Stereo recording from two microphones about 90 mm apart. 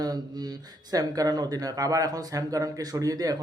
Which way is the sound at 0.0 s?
45° right (ahead or behind).